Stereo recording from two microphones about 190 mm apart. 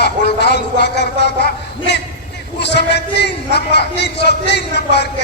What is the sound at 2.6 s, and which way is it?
A man's voice, 60° left (ahead or behind).